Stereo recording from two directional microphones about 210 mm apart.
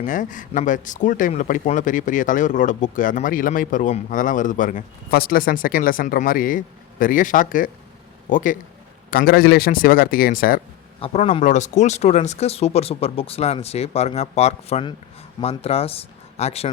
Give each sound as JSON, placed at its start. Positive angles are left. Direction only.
{"t": 0.0, "sound": "speech", "side_deg": 40}
{"t": 11.0, "sound": "speech", "side_deg": 30}